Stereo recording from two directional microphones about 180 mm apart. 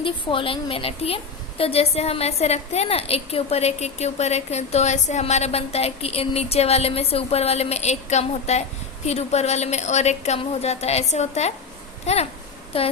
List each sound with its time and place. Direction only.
0.0 s a woman's voice: 30° left (ahead or behind)